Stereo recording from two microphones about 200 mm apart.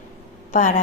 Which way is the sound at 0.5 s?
40° left (ahead or behind).